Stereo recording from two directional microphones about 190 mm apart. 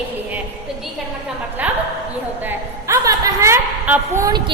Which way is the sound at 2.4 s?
10° right (ahead or behind).